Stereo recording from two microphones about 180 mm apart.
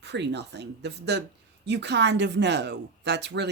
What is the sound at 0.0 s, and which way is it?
Speech, 70° right (ahead or behind).